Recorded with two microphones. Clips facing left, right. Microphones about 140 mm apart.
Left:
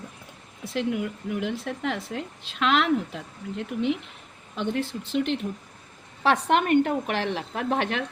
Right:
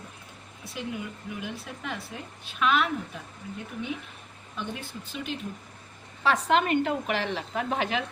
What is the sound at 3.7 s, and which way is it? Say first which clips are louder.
Speech: left 9 dB; 80° left.